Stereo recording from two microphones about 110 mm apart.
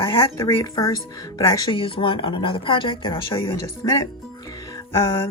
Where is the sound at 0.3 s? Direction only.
30° left (ahead or behind).